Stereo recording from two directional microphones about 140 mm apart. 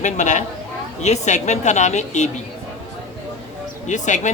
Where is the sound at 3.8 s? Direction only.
60° left (ahead or behind).